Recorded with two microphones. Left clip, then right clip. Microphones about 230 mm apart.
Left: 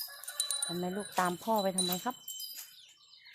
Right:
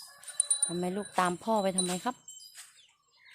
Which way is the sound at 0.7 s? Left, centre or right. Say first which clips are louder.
Right 4 dB; centre.